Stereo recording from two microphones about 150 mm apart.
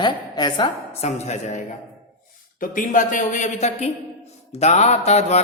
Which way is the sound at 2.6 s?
60° left (ahead or behind).